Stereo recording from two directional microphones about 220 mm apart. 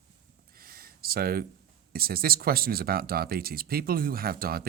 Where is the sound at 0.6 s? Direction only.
40° right (ahead or behind).